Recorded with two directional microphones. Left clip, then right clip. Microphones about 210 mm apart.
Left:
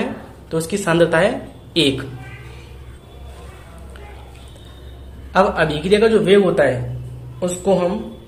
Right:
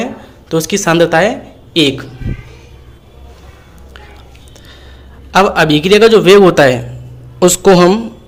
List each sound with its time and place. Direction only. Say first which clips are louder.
0.4 s speech: right 7 dB; 35° right (ahead or behind)
5.3 s a man's voice: right 7 dB; 35° right (ahead or behind); by 7.9 s 55° right (ahead or behind)